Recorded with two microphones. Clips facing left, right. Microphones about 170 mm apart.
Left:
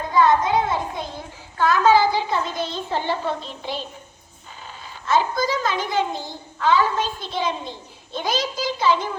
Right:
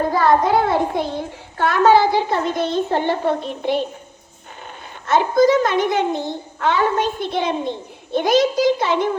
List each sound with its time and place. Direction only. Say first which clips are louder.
0.0 s a child's voice: right 2 dB; 60° right (ahead or behind)
5.0 s a child's voice: right 7 dB; 55° right (ahead or behind)